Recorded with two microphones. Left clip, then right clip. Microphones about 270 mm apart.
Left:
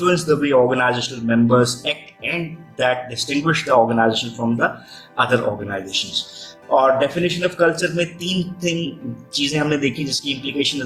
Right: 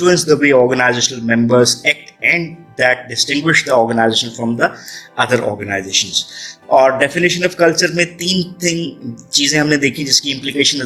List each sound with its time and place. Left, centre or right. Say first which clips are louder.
0.0 s a man's voice: right 6 dB; right